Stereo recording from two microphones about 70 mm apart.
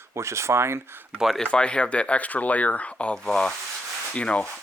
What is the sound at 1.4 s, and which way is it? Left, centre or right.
Speech, centre.